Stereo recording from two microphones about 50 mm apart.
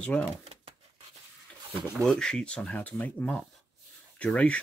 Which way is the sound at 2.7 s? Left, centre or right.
Left.